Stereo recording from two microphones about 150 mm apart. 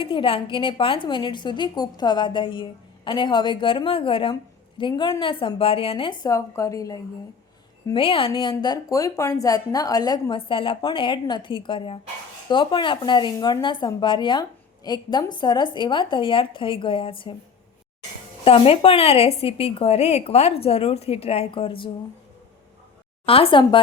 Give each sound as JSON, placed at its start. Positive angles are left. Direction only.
{"t": 0.0, "sound": "a woman's voice", "side_deg": 35}
{"t": 7.9, "sound": "a woman's voice", "side_deg": 35}
{"t": 18.4, "sound": "a woman's voice", "side_deg": 40}
{"t": 23.2, "sound": "a woman's voice", "side_deg": 40}